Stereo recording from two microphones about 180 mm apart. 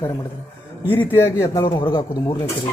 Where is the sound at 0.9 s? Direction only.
10° left (ahead or behind).